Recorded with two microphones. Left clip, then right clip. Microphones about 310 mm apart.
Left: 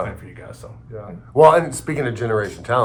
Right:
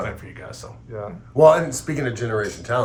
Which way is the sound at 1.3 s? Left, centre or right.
Centre.